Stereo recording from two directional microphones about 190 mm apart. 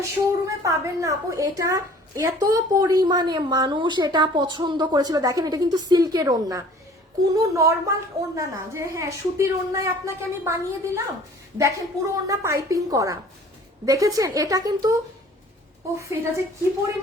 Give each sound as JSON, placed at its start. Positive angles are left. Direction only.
{"t": 0.0, "sound": "a woman's voice", "side_deg": -15}
{"t": 16.0, "sound": "a woman's voice", "side_deg": -15}